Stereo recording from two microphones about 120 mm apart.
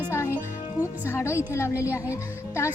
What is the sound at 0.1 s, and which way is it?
Music, 25° left (ahead or behind).